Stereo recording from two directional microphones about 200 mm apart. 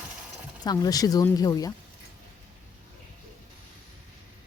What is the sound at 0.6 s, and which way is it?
Speech, 20° left (ahead or behind).